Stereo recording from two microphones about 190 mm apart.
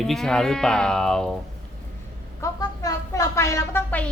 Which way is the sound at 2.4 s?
20° left (ahead or behind).